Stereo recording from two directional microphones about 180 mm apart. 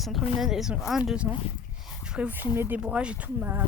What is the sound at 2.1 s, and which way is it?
Speech, 10° right (ahead or behind).